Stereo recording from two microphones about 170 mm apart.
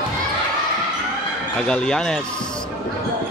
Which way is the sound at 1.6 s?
5° left (ahead or behind).